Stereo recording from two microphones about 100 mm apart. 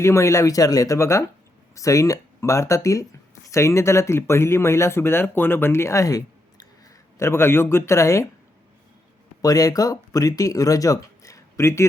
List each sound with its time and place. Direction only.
0.0 s speech: 30° left (ahead or behind)
7.2 s speech: 25° left (ahead or behind)
9.4 s speech: 40° left (ahead or behind)